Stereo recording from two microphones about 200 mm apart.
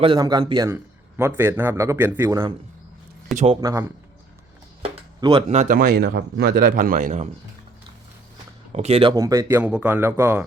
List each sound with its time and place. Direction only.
0.0 s a man's voice: 20° right (ahead or behind)
3.3 s speech: 30° right (ahead or behind)
3.6 s a man's voice: 15° right (ahead or behind); by 7.3 s 40° right (ahead or behind)
8.7 s a man's voice: 30° right (ahead or behind); by 10.4 s 10° right (ahead or behind)